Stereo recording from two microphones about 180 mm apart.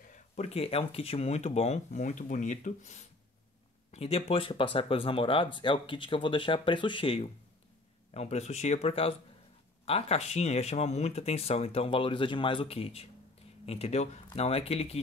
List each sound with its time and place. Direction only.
0.0 s speech: 40° left (ahead or behind)